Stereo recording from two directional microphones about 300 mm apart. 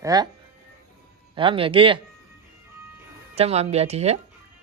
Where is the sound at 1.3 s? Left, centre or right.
Centre.